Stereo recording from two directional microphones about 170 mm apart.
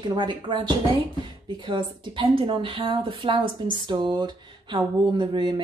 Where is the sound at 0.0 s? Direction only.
25° right (ahead or behind).